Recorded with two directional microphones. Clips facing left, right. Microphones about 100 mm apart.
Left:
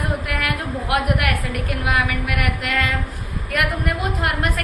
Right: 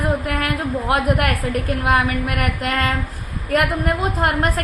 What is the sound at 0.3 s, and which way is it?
A woman's voice, 35° right (ahead or behind).